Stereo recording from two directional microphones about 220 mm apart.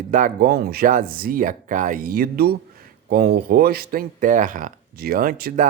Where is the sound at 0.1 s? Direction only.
40° right (ahead or behind).